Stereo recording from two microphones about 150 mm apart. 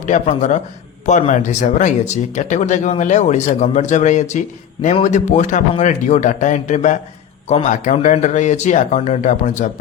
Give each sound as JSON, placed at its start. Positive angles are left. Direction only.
{"t": 0.0, "sound": "speech", "side_deg": 55}